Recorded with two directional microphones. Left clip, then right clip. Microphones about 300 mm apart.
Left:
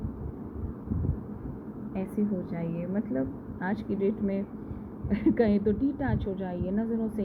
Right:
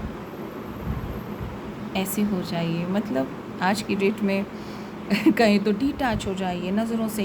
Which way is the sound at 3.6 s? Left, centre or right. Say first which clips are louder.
Right 7 dB; centre.